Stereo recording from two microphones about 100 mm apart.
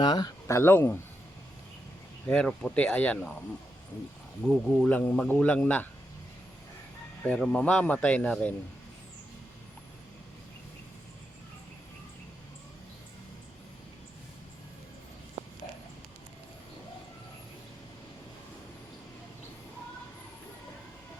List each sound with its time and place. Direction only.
0.0 s speech: 45° left (ahead or behind)
0.4 s speech: 25° left (ahead or behind)
2.2 s speech: 10° left (ahead or behind)
4.4 s speech: 10° left (ahead or behind)
7.3 s speech: 5° left (ahead or behind)
15.4 s a sound: 80° right